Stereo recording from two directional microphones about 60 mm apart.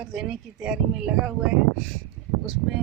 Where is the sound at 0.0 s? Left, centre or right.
Centre.